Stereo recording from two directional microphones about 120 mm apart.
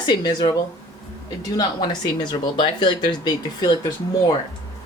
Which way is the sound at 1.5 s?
35° left (ahead or behind).